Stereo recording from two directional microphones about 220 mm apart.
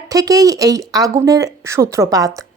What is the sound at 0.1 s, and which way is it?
Speech, 15° right (ahead or behind).